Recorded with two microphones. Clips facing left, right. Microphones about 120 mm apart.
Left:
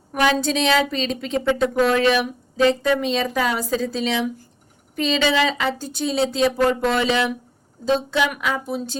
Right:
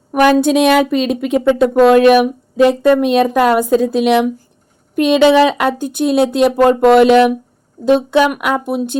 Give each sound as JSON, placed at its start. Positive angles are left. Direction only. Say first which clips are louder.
{"t": 0.1, "sound": "speech", "louder": "right 9 dB", "side_deg": -55}